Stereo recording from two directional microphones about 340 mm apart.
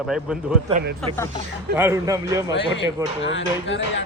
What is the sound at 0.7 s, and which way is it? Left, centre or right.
Speech, right.